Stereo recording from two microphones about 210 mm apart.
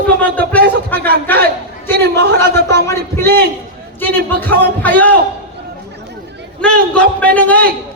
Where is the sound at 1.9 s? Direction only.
50° right (ahead or behind).